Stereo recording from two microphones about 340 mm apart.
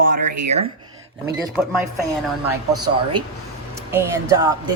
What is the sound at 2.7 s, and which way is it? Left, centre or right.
Speech, right.